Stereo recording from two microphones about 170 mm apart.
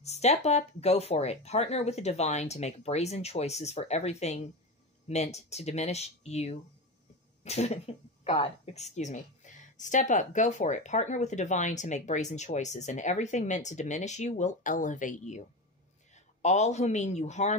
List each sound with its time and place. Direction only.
0.0 s speech: 40° left (ahead or behind)
16.4 s speech: 40° left (ahead or behind)